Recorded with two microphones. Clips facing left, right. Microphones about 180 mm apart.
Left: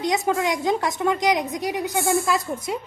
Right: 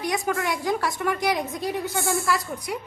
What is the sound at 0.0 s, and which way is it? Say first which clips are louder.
A woman's voice: left 4 dB; 20° left (ahead or behind).